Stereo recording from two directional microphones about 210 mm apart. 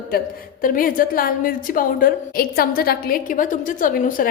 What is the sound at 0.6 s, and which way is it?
A woman's voice, 40° left (ahead or behind).